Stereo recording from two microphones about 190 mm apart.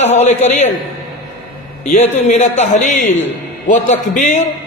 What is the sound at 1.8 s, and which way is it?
A man's voice, 40° left (ahead or behind).